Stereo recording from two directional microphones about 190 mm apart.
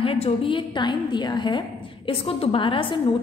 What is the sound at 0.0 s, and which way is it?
A woman's voice, 30° left (ahead or behind).